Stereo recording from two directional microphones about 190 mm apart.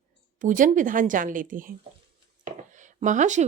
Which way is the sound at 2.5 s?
40° right (ahead or behind).